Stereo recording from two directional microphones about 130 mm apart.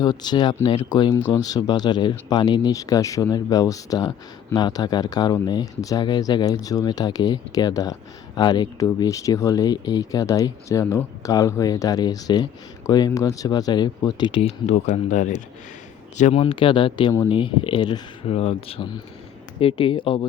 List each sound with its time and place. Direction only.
0.0 s speech: 35° left (ahead or behind)
14.7 s speech: 65° left (ahead or behind)
16.4 s speech: 40° left (ahead or behind)
18.3 s speech: 50° left (ahead or behind)